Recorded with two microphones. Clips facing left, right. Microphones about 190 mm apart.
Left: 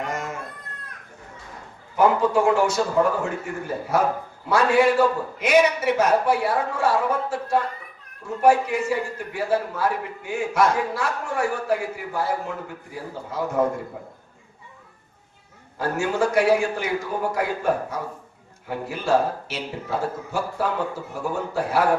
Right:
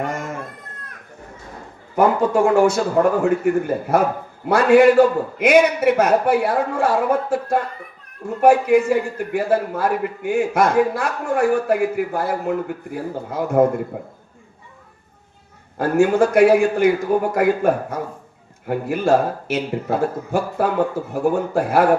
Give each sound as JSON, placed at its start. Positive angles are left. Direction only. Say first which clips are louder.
{"t": 2.0, "sound": "a man's voice", "louder": "right 3 dB", "side_deg": -50}
{"t": 15.8, "sound": "a man's voice", "louder": "right 7 dB", "side_deg": -55}